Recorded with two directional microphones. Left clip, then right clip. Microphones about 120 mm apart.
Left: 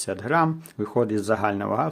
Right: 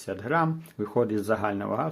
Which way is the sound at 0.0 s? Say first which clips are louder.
Left 4 dB; 35° left (ahead or behind).